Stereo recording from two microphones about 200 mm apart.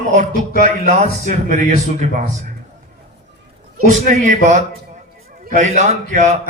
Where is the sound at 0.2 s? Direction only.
35° right (ahead or behind).